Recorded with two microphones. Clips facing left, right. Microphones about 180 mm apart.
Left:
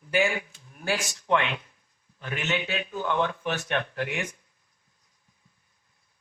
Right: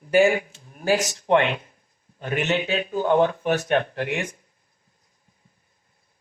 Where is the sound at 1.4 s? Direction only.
50° right (ahead or behind).